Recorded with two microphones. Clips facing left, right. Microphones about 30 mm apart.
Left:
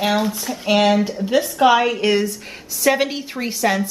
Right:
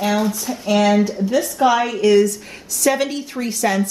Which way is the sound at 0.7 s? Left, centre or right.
Left.